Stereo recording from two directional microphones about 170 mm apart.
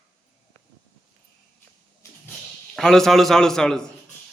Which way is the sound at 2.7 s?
Centre (ahead or behind).